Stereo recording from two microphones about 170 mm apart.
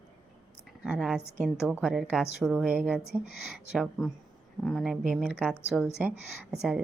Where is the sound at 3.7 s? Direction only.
Centre (ahead or behind).